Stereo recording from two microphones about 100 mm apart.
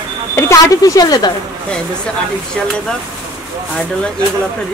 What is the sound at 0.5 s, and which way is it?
Speech, 35° left (ahead or behind).